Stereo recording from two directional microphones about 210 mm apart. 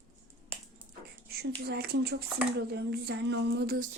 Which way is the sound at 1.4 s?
50° right (ahead or behind).